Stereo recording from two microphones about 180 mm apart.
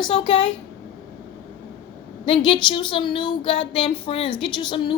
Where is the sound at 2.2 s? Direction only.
30° left (ahead or behind).